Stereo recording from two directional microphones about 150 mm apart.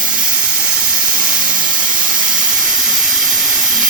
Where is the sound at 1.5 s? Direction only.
5° right (ahead or behind).